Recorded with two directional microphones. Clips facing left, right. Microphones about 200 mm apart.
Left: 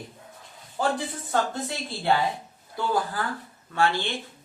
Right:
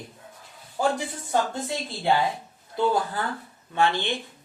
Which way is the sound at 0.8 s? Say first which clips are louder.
Right 1 dB; 15° right (ahead or behind).